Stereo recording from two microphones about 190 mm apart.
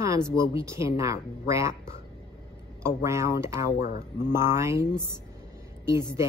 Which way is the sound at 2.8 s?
15° right (ahead or behind).